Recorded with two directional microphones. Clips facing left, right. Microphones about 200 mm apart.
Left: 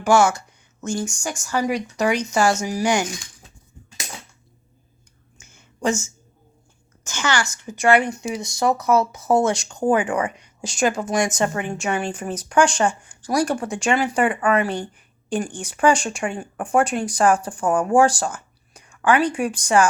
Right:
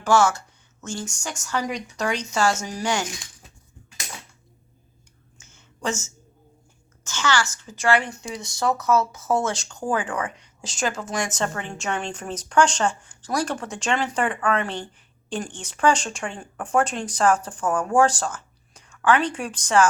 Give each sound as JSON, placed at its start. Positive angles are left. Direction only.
{"t": 0.0, "sound": "a woman's voice", "side_deg": 10}
{"t": 5.4, "sound": "a sound", "side_deg": 15}
{"t": 7.0, "sound": "a woman's voice", "side_deg": 15}